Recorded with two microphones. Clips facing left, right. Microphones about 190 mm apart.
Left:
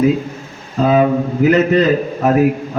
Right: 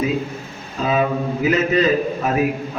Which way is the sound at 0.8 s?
55° left (ahead or behind).